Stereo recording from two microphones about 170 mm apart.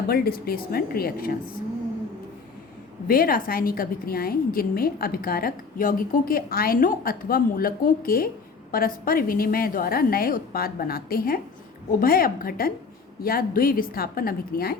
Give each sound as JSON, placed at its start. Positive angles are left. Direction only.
{"t": 0.1, "sound": "a woman's voice", "side_deg": 60}
{"t": 3.1, "sound": "a woman's voice", "side_deg": 60}